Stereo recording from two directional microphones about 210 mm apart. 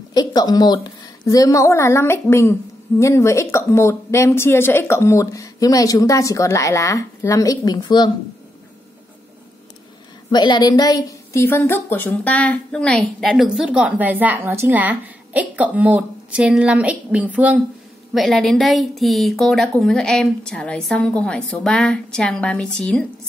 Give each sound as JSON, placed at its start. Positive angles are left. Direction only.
{"t": 0.1, "sound": "a woman's voice", "side_deg": 20}
{"t": 10.3, "sound": "a woman's voice", "side_deg": 20}